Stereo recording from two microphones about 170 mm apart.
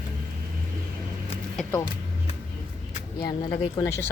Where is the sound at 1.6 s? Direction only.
10° left (ahead or behind).